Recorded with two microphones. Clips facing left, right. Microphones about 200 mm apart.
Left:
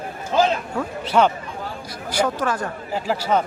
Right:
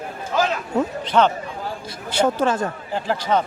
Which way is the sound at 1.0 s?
10° left (ahead or behind).